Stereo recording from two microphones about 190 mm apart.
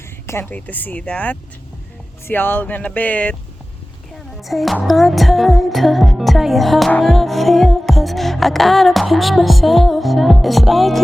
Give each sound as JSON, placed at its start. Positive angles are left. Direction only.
{"t": 0.3, "sound": "speech", "side_deg": 10}
{"t": 4.4, "sound": "music", "side_deg": 0}